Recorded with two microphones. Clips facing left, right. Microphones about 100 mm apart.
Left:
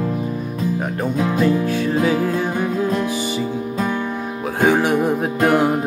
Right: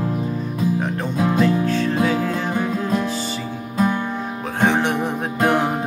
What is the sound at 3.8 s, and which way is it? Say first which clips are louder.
Music: right 4 dB; 15° right (ahead or behind).